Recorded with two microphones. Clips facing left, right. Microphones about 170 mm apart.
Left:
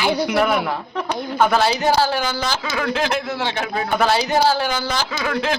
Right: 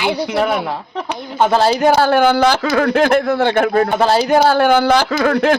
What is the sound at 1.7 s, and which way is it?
A man's voice, 55° right (ahead or behind).